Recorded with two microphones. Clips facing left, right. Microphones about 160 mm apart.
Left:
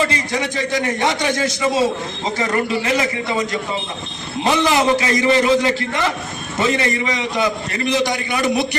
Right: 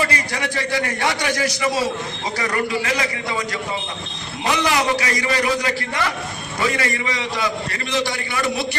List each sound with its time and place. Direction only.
0.0 s a man's voice: 20° left (ahead or behind)